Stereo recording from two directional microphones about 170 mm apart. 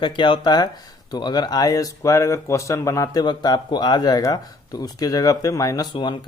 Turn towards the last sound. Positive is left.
turn(degrees=25)  # may be behind; listen again after turning